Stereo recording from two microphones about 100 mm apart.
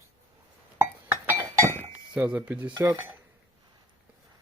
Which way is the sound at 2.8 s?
25° right (ahead or behind).